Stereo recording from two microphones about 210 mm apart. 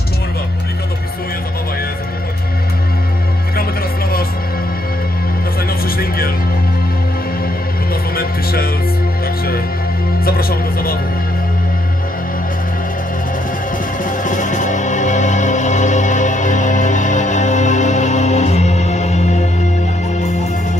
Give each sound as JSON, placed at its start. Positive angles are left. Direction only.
{"t": 5.9, "sound": "music", "side_deg": 45}
{"t": 8.2, "sound": "music", "side_deg": 45}
{"t": 10.2, "sound": "music", "side_deg": 45}
{"t": 14.0, "sound": "music", "side_deg": 40}